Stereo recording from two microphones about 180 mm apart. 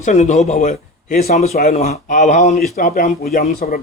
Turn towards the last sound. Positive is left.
turn(degrees=45)  # may be behind; listen again after turning